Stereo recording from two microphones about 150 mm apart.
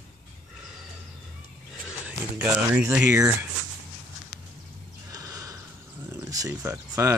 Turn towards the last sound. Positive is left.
turn(degrees=-20)  # may be behind; listen again after turning